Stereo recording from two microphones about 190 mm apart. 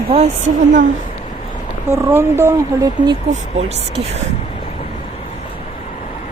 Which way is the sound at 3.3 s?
35° right (ahead or behind).